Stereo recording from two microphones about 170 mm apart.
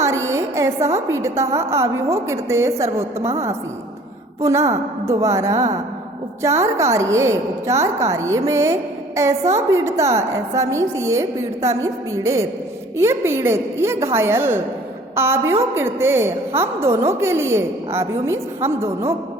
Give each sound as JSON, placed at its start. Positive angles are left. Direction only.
{"t": 0.0, "sound": "a sound", "side_deg": -15}
{"t": 0.9, "sound": "a woman's voice", "side_deg": -15}
{"t": 4.4, "sound": "a woman's voice", "side_deg": -15}